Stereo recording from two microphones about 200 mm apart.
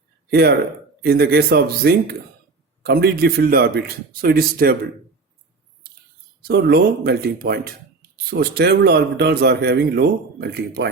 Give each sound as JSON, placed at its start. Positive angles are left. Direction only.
{"t": 0.3, "sound": "a man's voice", "side_deg": -55}
{"t": 6.5, "sound": "a man's voice", "side_deg": -50}